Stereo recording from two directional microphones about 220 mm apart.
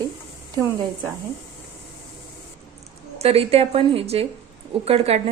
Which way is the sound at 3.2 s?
25° right (ahead or behind).